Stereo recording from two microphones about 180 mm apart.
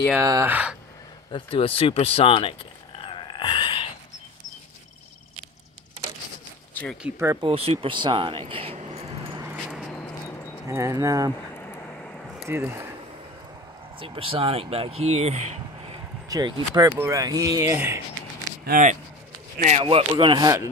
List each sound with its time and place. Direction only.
0.2 s speech: 15° right (ahead or behind)
1.3 s speech: 30° left (ahead or behind)
6.7 s a sound: 5° left (ahead or behind)
7.0 s speech: 15° right (ahead or behind)
7.4 s speech: 35° right (ahead or behind)
10.7 s speech: 15° right (ahead or behind)
11.5 s vehicle: 10° left (ahead or behind)
12.4 s speech: 15° right (ahead or behind)
13.9 s speech: 30° right (ahead or behind)
16.3 s speech: 25° right (ahead or behind)
18.7 s speech: 50° right (ahead or behind)
19.6 s speech: 60° right (ahead or behind)
20.1 s speech: 25° right (ahead or behind)